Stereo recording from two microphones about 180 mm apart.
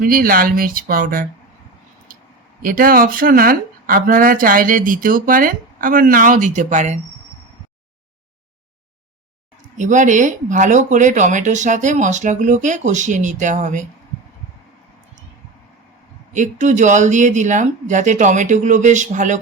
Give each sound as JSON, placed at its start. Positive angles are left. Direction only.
{"t": 0.0, "sound": "speech", "side_deg": -55}
{"t": 2.6, "sound": "speech", "side_deg": -50}
{"t": 9.7, "sound": "speech", "side_deg": -40}
{"t": 16.3, "sound": "speech", "side_deg": -45}